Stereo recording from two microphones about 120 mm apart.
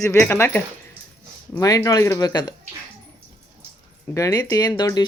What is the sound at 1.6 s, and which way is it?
Speech, 30° left (ahead or behind).